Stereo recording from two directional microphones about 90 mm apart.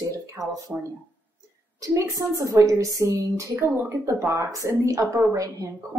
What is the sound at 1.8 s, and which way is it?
A woman's voice, 35° right (ahead or behind).